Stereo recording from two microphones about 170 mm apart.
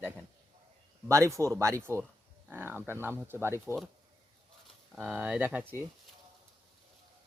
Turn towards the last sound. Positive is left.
turn(degrees=-10)  # may be behind; listen again after turning